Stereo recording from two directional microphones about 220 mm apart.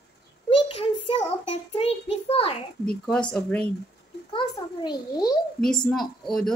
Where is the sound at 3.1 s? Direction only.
5° left (ahead or behind).